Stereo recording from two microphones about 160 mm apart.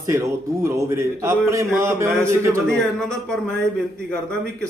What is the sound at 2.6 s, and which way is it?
Speech, 5° left (ahead or behind).